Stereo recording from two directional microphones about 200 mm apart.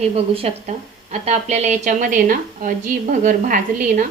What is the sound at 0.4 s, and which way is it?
A woman's voice, 30° right (ahead or behind).